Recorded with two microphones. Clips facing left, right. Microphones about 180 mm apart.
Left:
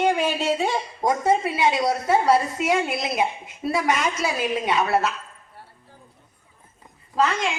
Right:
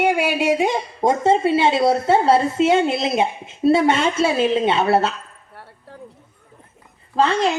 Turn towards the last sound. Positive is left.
turn(degrees=-35)  # may be behind; listen again after turning